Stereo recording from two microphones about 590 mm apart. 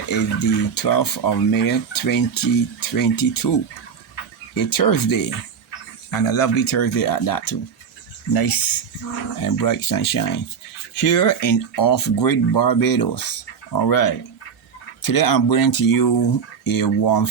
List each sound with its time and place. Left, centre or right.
0.1 s speech: left
4.5 s speech: left